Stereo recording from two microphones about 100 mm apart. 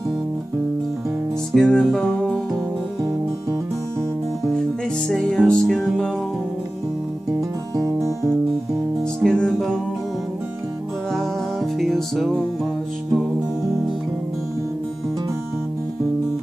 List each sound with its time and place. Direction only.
1.5 s music: 5° left (ahead or behind)
5.0 s music: 5° left (ahead or behind)
7.3 s music: 35° right (ahead or behind)
9.2 s music: 5° left (ahead or behind)
11.1 s music: 5° left (ahead or behind)